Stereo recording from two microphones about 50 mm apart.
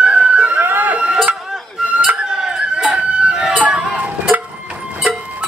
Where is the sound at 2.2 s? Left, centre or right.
Centre.